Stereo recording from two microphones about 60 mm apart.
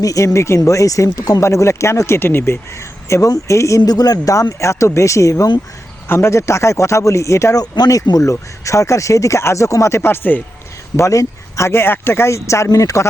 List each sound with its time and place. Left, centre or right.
0.0 s speech: left
0.3 s speech: left
1.4 s speech: left
3.2 s speech: left
6.1 s speech: left
10.0 s speech: left
10.9 s speech: left